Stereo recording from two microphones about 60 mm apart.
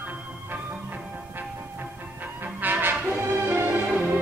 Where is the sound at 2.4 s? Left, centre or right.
Right.